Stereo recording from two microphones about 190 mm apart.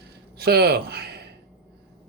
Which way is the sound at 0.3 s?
55° right (ahead or behind).